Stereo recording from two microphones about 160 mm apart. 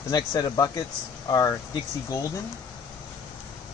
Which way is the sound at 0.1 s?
25° left (ahead or behind).